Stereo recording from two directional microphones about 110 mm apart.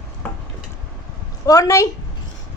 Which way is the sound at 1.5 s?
30° left (ahead or behind).